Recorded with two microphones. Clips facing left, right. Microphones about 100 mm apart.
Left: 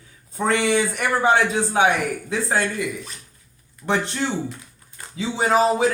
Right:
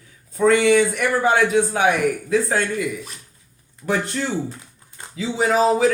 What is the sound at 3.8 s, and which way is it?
A man's voice, 25° left (ahead or behind).